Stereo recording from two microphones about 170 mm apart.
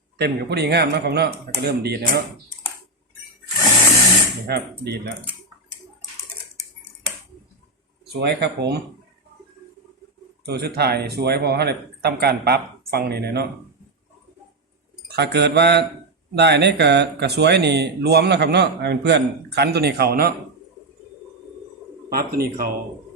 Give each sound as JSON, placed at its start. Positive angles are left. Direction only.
{"t": 0.2, "sound": "speech", "side_deg": -75}
{"t": 4.5, "sound": "speech", "side_deg": -75}
{"t": 8.0, "sound": "speech", "side_deg": -75}
{"t": 10.4, "sound": "speech", "side_deg": -70}
{"t": 15.1, "sound": "speech", "side_deg": -80}
{"t": 22.1, "sound": "speech", "side_deg": -60}